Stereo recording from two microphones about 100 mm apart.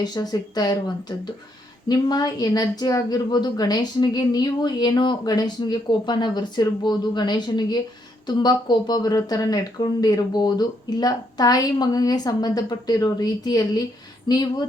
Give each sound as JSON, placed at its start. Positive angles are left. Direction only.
{"t": 0.0, "sound": "a woman's voice", "side_deg": 45}